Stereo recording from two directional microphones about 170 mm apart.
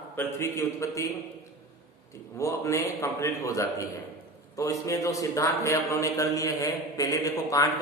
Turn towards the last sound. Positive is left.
turn(degrees=20)  # may be behind; listen again after turning